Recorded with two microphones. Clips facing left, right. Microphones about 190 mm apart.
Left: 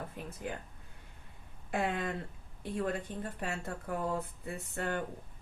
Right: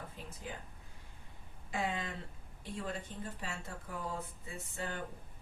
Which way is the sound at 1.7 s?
60° left (ahead or behind).